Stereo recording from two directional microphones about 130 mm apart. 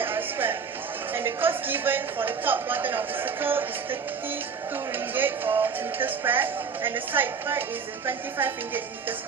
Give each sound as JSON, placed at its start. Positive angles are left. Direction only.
{"t": 0.0, "sound": "music", "side_deg": -15}
{"t": 1.1, "sound": "speech", "side_deg": -15}
{"t": 5.1, "sound": "speech", "side_deg": -15}